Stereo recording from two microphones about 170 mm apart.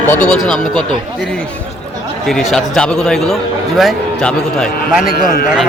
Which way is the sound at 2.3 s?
Centre (ahead or behind).